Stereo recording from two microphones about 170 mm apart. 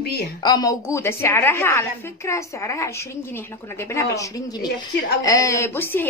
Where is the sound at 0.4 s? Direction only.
25° left (ahead or behind).